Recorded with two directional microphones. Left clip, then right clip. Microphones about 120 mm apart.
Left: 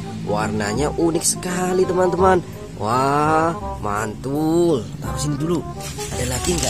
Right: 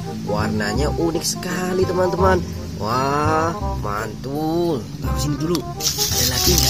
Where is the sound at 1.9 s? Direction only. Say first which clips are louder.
Even; 10° left (ahead or behind).